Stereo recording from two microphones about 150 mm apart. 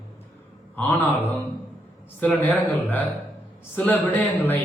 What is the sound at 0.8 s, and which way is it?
Speech, 10° left (ahead or behind).